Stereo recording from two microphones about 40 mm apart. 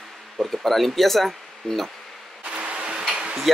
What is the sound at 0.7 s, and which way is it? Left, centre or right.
Speech, centre.